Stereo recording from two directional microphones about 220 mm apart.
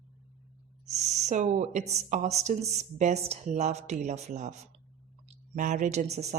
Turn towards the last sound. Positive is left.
turn(degrees=-30)  # may be behind; listen again after turning